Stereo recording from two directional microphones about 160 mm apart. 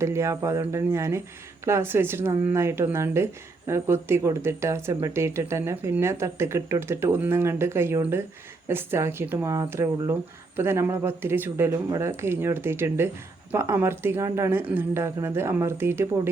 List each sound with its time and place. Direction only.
0.0 s speech: 20° right (ahead or behind)